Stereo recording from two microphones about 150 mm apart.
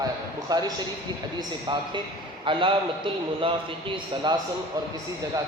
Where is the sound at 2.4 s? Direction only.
35° right (ahead or behind).